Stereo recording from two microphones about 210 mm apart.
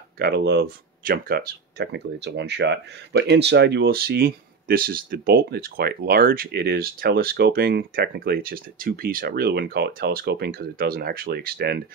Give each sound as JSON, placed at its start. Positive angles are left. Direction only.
{"t": 0.2, "sound": "speech", "side_deg": -50}